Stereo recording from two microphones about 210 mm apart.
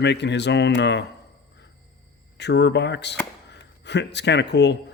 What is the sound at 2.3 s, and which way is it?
Speech, 55° left (ahead or behind).